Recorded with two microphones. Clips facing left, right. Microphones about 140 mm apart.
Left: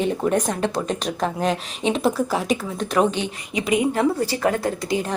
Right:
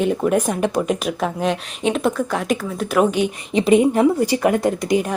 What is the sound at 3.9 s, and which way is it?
A woman's voice, 15° right (ahead or behind).